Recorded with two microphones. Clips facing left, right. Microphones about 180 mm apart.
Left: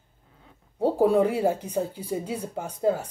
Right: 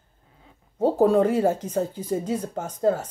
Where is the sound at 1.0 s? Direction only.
10° left (ahead or behind).